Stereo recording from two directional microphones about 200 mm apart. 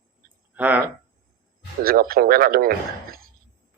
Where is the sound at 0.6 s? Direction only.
10° right (ahead or behind).